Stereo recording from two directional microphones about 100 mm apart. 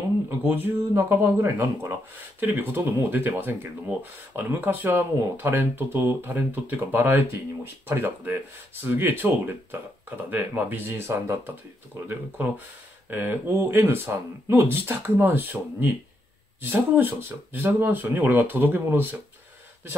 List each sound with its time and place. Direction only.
0.4 s speech: 20° right (ahead or behind)
16.9 s speech: 20° right (ahead or behind)